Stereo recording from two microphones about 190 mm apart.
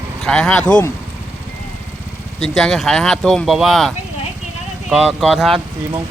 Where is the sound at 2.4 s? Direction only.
Centre (ahead or behind).